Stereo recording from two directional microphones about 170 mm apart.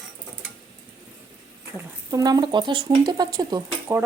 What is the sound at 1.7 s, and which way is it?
Speech, 20° right (ahead or behind).